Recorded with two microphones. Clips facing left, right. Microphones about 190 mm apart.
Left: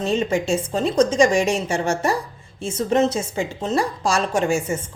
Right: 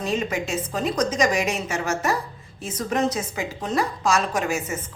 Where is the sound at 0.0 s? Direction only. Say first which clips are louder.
Left 4 dB; 30° left (ahead or behind).